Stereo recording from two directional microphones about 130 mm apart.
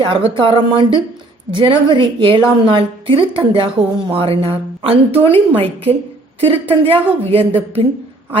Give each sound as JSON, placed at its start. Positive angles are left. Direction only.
{"t": 0.1, "sound": "a woman's voice", "side_deg": -40}